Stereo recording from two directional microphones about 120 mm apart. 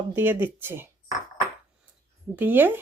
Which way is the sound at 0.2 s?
15° right (ahead or behind).